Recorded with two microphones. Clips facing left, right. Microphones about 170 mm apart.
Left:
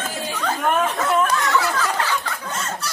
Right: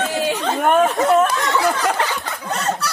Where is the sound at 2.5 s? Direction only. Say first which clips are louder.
Right 9 dB; 65° right (ahead or behind).